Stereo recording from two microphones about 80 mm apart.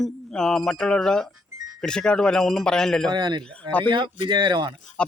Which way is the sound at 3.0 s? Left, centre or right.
Right.